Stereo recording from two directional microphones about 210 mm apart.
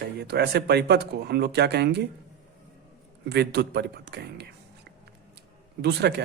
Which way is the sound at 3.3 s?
55° right (ahead or behind).